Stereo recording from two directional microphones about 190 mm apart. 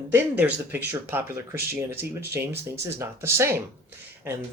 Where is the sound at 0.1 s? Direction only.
10° right (ahead or behind).